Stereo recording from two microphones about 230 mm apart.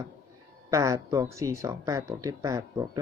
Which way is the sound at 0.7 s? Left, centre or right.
Centre.